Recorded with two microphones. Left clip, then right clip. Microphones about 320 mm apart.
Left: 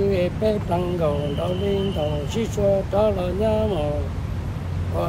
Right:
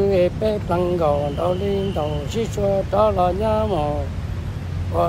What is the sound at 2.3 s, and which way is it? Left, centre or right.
Speech, centre.